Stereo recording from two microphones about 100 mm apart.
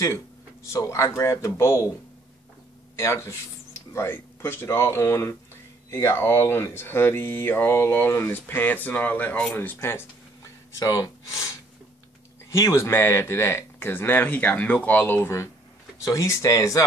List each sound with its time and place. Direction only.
0.7 s speech: 30° left (ahead or behind)
3.0 s speech: 30° left (ahead or behind)
12.4 s speech: 30° left (ahead or behind)